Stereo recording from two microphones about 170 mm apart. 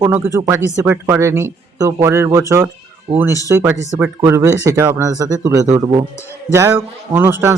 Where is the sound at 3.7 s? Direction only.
20° left (ahead or behind).